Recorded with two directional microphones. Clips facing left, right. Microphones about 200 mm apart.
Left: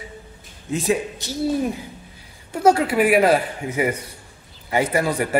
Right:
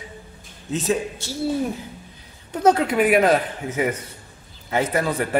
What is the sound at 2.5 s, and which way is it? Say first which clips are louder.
A man's voice: left 1 dB; 10° left (ahead or behind).